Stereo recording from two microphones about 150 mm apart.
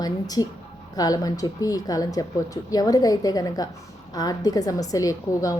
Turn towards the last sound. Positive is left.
turn(degrees=25)  # may be behind; listen again after turning